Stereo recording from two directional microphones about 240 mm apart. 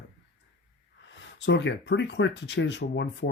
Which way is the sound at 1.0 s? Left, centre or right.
Left.